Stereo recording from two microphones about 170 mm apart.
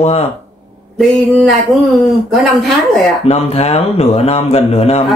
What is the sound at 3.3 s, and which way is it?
Speech, 35° left (ahead or behind).